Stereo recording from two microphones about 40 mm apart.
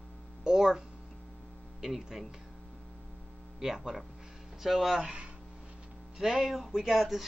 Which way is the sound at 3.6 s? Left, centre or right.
Centre.